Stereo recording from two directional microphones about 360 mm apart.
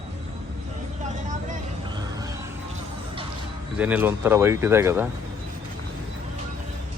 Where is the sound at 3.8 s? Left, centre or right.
Centre.